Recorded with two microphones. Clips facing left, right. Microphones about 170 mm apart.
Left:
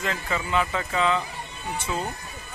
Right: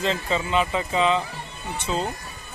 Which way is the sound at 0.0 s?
20° right (ahead or behind).